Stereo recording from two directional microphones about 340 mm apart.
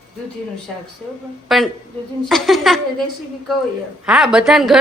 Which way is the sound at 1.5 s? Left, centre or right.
Centre.